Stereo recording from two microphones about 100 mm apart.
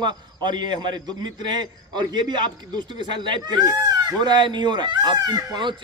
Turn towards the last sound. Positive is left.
turn(degrees=-45)  # may be behind; listen again after turning